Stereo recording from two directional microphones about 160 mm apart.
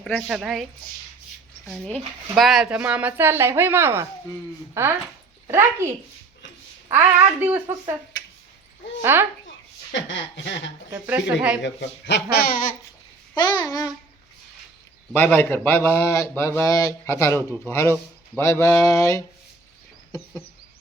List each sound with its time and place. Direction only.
0.0 s a woman's voice: centre (ahead or behind); by 5.9 s 15° right (ahead or behind)
6.9 s speech: 15° right (ahead or behind)
9.0 s speech: 15° right (ahead or behind)
10.9 s speech: 10° right (ahead or behind)
11.8 s speech: 90° left; by 12.7 s 65° left (ahead or behind)
13.3 s a sound: 25° left (ahead or behind)
15.1 s a man's voice: 10° left (ahead or behind)
18.3 s a sound: 15° left (ahead or behind)